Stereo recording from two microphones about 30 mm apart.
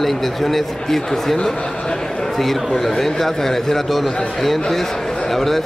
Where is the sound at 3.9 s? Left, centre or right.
Centre.